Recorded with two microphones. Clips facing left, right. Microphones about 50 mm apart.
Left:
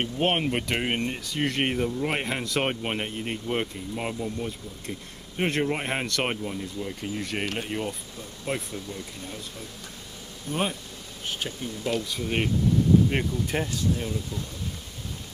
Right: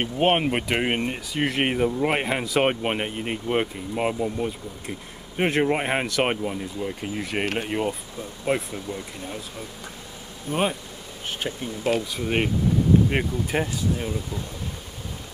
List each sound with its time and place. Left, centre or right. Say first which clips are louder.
0.0 s speech: right 4 dB; centre
10.5 s speech: right 4 dB; centre